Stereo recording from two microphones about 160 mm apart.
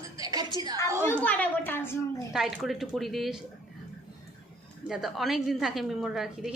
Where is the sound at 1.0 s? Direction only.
10° left (ahead or behind).